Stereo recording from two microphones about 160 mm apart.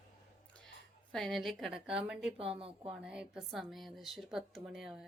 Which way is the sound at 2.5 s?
35° right (ahead or behind).